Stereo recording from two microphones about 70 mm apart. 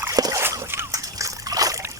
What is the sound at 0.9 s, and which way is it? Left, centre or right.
Trickle, right.